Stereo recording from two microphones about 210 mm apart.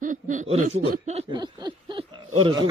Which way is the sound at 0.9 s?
35° right (ahead or behind).